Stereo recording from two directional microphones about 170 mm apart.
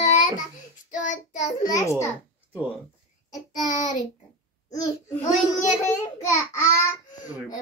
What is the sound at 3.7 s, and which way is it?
Child singing, 50° left (ahead or behind).